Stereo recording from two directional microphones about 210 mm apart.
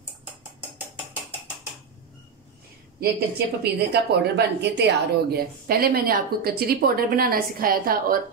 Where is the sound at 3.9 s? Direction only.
50° right (ahead or behind).